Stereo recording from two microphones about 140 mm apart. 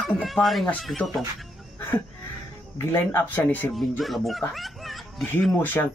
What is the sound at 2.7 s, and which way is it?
Speech, 20° left (ahead or behind).